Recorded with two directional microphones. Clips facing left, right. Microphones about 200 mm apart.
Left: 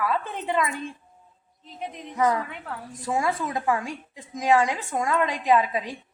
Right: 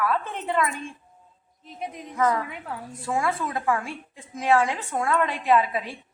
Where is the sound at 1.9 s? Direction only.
10° right (ahead or behind).